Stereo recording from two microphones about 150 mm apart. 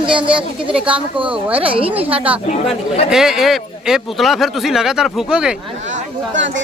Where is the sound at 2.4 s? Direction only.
45° left (ahead or behind).